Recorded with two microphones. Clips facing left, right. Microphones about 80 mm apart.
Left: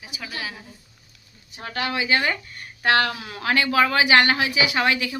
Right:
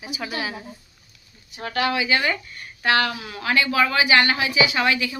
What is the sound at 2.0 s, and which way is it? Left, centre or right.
A woman's voice, left.